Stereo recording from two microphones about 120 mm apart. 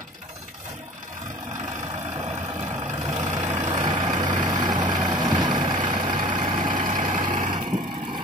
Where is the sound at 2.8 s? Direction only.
85° right.